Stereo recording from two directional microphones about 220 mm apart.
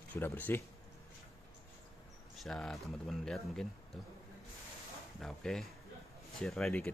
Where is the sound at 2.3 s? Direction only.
Centre (ahead or behind).